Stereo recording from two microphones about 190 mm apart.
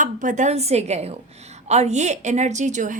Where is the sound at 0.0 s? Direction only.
45° right (ahead or behind).